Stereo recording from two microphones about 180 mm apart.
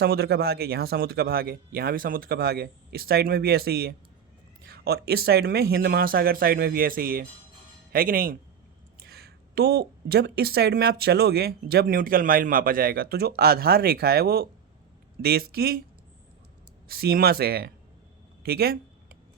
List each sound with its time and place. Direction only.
0.0 s speech: 60° right (ahead or behind)
9.0 s speech: 60° right (ahead or behind)
16.9 s speech: 55° right (ahead or behind)
18.4 s a sound: 60° right (ahead or behind)